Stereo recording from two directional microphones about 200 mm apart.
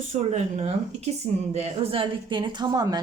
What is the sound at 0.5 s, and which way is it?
A woman's voice, 30° right (ahead or behind).